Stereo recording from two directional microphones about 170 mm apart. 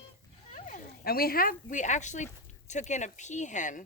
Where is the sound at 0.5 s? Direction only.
50° left (ahead or behind).